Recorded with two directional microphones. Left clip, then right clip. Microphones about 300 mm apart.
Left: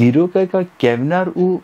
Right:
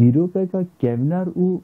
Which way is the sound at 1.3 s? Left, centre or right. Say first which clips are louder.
Left 5 dB; left.